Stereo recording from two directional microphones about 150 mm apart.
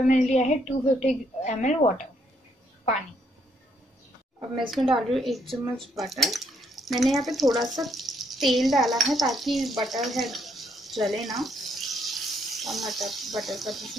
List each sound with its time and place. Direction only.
0.0 s a woman's voice: 55° left (ahead or behind)
4.6 s a woman's voice: centre (ahead or behind)